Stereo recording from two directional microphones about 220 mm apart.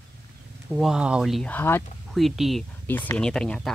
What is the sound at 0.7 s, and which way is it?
Speech, centre (ahead or behind).